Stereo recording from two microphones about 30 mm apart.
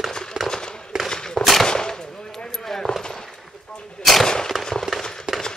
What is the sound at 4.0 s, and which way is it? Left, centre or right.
Gunshot, centre.